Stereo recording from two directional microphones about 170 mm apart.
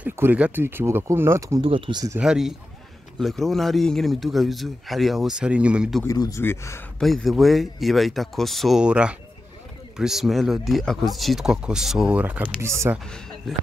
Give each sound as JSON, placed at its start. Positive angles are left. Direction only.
{"t": 0.0, "sound": "speech", "side_deg": -10}
{"t": 1.6, "sound": "speech", "side_deg": -30}
{"t": 2.1, "sound": "speech", "side_deg": -5}
{"t": 6.0, "sound": "speech", "side_deg": 20}
{"t": 7.0, "sound": "speech", "side_deg": 0}
{"t": 13.0, "sound": "speech", "side_deg": 0}